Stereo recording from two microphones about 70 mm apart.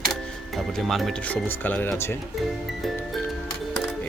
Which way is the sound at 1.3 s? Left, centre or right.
Left.